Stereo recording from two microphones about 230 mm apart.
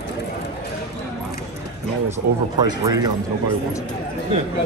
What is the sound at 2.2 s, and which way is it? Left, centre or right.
Speech, right.